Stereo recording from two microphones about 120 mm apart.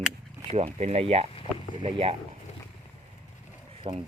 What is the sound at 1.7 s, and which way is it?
Speech, 45° right (ahead or behind).